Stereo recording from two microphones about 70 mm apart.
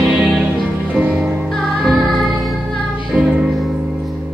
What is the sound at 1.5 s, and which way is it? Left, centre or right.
Music, centre.